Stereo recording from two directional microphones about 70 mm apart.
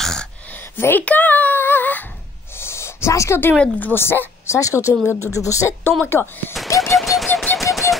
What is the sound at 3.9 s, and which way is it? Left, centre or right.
Speech, left.